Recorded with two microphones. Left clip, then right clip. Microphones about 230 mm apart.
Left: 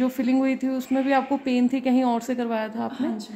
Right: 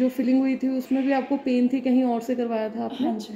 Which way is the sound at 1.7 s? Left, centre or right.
Left.